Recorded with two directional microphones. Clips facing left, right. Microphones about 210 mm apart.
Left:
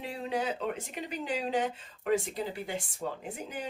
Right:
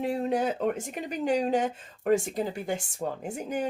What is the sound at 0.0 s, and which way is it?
Speech, 50° right (ahead or behind).